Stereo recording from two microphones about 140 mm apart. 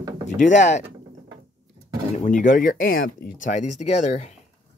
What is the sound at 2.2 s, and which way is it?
Speech, 70° left (ahead or behind).